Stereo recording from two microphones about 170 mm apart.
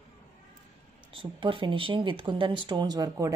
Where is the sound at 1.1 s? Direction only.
30° right (ahead or behind).